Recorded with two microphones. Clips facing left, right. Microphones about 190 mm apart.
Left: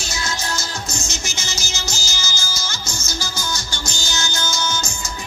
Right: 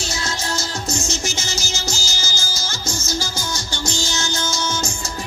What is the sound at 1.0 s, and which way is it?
Music, 35° right (ahead or behind).